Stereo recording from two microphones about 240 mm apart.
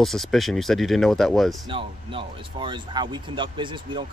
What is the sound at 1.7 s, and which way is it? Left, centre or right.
Speech, right.